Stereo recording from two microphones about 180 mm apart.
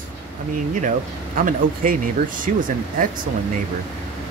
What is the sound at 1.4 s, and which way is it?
Speech, 50° right (ahead or behind).